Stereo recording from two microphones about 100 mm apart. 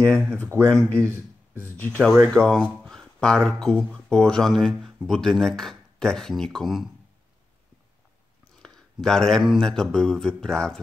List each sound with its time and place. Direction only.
0.0 s speech: 20° right (ahead or behind)
0.7 s speech: 15° left (ahead or behind)
1.0 s speech: 25° right (ahead or behind)
1.8 s speech: 15° left (ahead or behind); by 6.9 s centre (ahead or behind)
8.6 s speech: 5° left (ahead or behind)